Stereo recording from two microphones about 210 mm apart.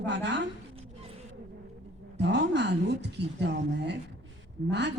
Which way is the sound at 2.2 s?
55° right (ahead or behind).